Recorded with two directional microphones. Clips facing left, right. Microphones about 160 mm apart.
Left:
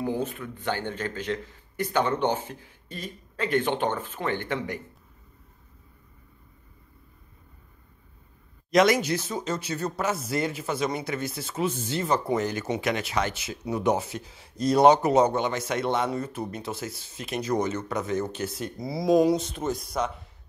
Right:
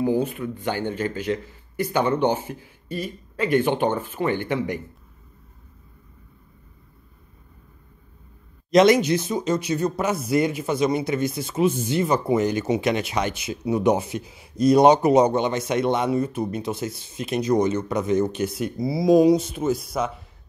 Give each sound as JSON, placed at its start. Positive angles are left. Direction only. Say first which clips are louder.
{"t": 0.0, "sound": "speech", "louder": "right 7 dB", "side_deg": -10}
{"t": 8.7, "sound": "speech", "louder": "right 5 dB", "side_deg": -20}